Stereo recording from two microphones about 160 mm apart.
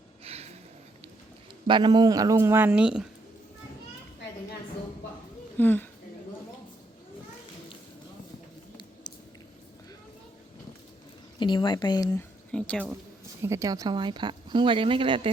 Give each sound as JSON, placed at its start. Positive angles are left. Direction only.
{"t": 0.3, "sound": "a sound", "side_deg": -40}
{"t": 1.6, "sound": "speech", "side_deg": -30}
{"t": 5.5, "sound": "speech", "side_deg": 10}
{"t": 11.3, "sound": "speech", "side_deg": 30}
{"t": 12.5, "sound": "speech", "side_deg": 5}
{"t": 13.4, "sound": "speech", "side_deg": -20}